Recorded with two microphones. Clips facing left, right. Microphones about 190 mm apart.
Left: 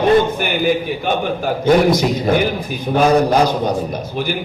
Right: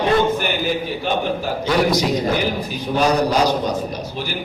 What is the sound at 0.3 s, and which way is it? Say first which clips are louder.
A man's voice: left 4 dB; 55° left (ahead or behind).